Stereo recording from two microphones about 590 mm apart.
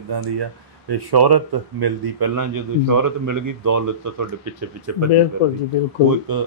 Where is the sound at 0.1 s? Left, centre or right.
Right.